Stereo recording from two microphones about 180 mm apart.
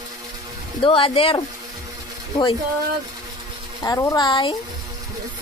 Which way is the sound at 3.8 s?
20° left (ahead or behind).